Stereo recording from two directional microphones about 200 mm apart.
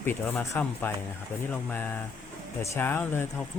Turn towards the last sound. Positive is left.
turn(degrees=10)  # may be behind; listen again after turning